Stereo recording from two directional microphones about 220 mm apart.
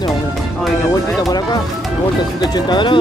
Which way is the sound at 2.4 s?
20° left (ahead or behind).